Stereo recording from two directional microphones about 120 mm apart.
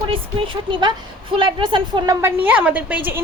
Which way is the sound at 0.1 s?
45° right (ahead or behind).